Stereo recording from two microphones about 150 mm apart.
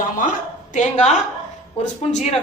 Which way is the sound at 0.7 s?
55° left (ahead or behind).